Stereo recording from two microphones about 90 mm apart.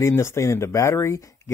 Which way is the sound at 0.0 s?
30° left (ahead or behind).